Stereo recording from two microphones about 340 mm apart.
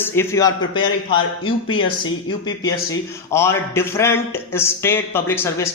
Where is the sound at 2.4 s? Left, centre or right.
Centre.